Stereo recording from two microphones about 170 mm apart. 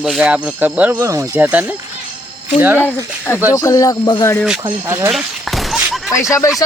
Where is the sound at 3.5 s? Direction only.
20° left (ahead or behind).